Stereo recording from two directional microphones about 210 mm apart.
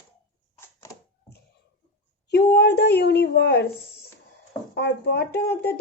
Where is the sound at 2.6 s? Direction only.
50° left (ahead or behind).